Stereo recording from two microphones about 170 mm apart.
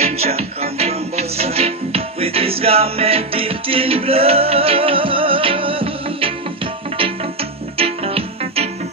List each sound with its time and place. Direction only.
0.0 s music: 35° right (ahead or behind)
7.7 s music: 35° right (ahead or behind)